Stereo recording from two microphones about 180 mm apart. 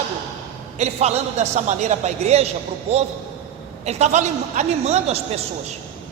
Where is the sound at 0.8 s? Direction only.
35° right (ahead or behind).